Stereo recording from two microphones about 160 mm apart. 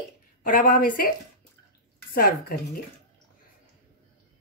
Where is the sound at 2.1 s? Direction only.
70° left (ahead or behind).